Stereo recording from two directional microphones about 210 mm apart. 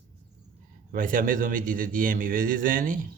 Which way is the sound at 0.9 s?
40° right (ahead or behind).